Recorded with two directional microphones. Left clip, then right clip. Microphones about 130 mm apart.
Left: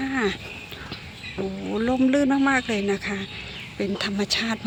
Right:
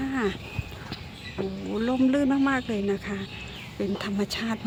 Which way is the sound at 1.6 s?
20° left (ahead or behind).